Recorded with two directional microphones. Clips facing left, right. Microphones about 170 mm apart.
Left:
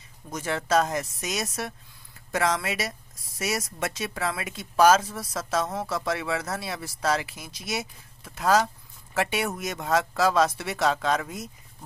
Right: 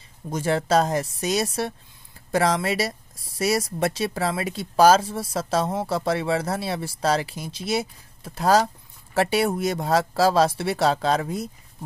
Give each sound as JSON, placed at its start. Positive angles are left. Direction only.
{"t": 0.3, "sound": "speech", "side_deg": -30}